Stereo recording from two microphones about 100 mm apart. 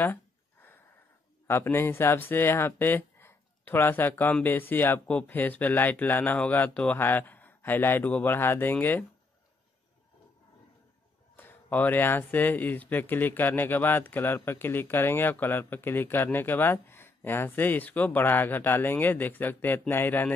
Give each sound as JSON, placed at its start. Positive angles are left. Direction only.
{"t": 0.0, "sound": "a sound", "side_deg": 20}
{"t": 1.5, "sound": "speech", "side_deg": 25}
{"t": 11.3, "sound": "speech", "side_deg": 20}